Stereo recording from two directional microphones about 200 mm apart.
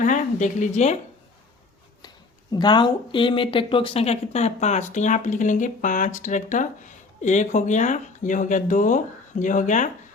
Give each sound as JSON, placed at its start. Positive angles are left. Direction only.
{"t": 0.0, "sound": "speech", "side_deg": 40}
{"t": 2.5, "sound": "speech", "side_deg": 20}